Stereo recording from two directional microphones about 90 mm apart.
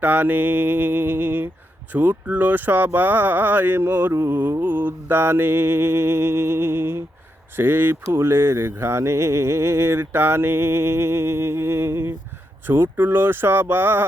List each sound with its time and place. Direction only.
0.0 s speech: 15° right (ahead or behind)